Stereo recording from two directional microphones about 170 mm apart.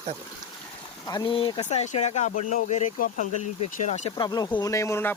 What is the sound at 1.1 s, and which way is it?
Speech, 25° left (ahead or behind).